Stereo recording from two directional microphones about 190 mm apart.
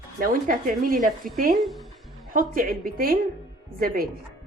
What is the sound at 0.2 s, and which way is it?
A woman's voice, 45° right (ahead or behind).